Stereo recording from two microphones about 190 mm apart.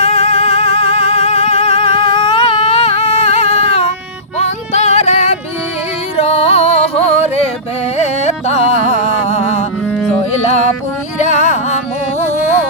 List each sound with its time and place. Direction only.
0.0 s music: 35° left (ahead or behind)
1.8 s music: 20° left (ahead or behind); by 9.6 s 35° left (ahead or behind)
9.8 s music: 10° left (ahead or behind)
11.2 s music: 40° left (ahead or behind)